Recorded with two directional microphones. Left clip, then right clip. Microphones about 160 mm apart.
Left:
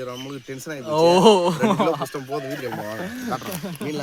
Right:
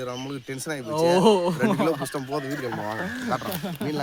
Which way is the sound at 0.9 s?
40° left (ahead or behind).